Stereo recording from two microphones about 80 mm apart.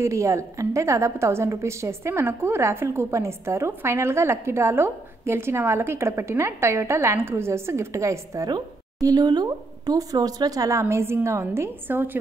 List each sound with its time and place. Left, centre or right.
0.0 s a woman's voice: right
9.0 s a woman's voice: right